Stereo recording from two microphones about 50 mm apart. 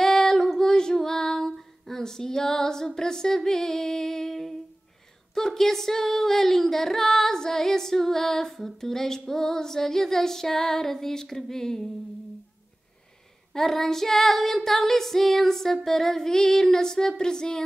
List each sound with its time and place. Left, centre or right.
0.0 s female singing: centre
5.3 s singing: centre
13.5 s singing: centre